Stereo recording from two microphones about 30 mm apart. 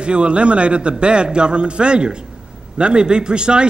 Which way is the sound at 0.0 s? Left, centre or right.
Right.